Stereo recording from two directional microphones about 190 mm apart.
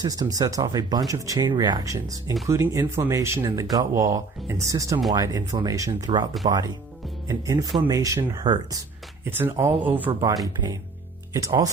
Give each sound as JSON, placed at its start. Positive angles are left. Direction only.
{"t": 0.0, "sound": "speech", "side_deg": -20}
{"t": 11.3, "sound": "speech", "side_deg": -15}